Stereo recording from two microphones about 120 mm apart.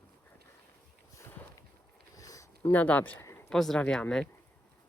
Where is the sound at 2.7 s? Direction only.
15° left (ahead or behind).